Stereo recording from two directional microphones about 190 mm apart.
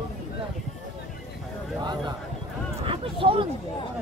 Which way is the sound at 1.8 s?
20° right (ahead or behind).